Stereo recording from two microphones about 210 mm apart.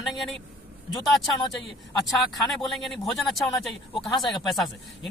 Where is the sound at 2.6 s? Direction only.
Centre (ahead or behind).